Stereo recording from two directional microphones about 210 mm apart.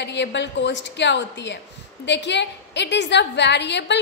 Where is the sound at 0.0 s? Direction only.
55° left (ahead or behind).